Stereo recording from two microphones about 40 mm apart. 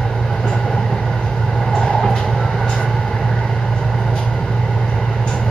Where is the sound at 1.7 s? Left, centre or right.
Centre.